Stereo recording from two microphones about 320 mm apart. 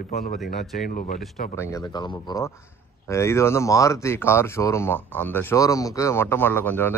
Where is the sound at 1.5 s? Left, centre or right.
Centre.